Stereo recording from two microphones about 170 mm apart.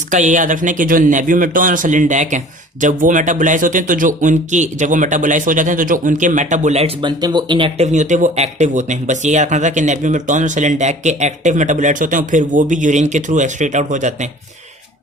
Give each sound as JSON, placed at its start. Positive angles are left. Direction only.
{"t": 0.1, "sound": "speech", "side_deg": -45}
{"t": 7.9, "sound": "speech", "side_deg": -45}